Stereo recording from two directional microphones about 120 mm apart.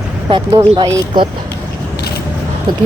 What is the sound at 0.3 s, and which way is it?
Speech, 45° right (ahead or behind).